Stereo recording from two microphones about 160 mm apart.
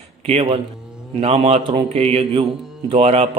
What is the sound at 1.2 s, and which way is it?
Speech, 40° right (ahead or behind).